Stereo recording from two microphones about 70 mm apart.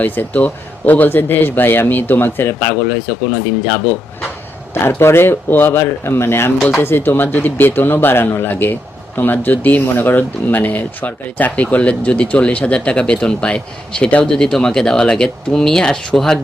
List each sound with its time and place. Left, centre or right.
0.0 s speech: left
4.7 s speech: left; by 16.4 s centre